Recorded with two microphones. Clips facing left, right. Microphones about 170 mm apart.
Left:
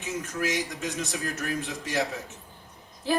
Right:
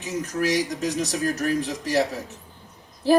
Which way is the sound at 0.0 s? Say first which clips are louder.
Right 5 dB; 35° right (ahead or behind).